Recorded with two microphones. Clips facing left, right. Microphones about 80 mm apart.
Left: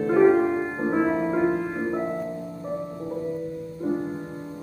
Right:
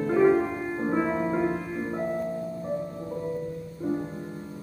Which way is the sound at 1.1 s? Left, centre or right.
Centre.